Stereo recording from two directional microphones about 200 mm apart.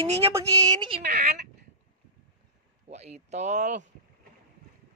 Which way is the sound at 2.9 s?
35° right (ahead or behind).